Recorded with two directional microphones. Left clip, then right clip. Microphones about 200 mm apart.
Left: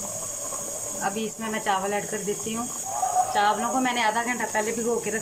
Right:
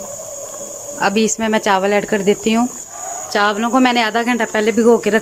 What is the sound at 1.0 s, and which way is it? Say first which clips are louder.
Cricket: right 14 dB; 55° right (ahead or behind).